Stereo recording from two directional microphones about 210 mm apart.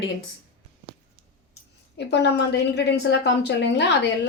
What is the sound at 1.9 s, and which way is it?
A woman's voice, 55° left (ahead or behind).